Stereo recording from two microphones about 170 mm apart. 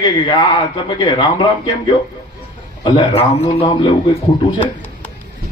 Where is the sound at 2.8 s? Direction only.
30° left (ahead or behind).